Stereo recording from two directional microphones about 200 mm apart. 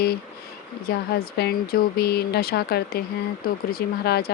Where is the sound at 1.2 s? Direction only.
50° left (ahead or behind).